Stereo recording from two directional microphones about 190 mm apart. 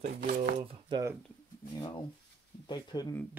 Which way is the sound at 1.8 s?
20° left (ahead or behind).